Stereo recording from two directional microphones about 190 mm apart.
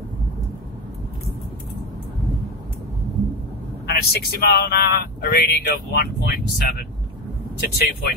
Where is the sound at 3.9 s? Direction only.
55° left (ahead or behind).